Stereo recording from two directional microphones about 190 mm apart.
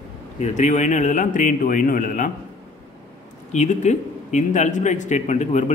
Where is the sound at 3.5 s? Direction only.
40° left (ahead or behind).